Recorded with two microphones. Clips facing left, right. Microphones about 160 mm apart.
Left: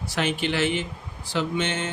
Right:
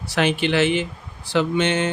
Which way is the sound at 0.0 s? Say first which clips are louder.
Right 5 dB; 75° right (ahead or behind).